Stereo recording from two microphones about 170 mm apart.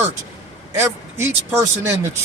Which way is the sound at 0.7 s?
15° right (ahead or behind).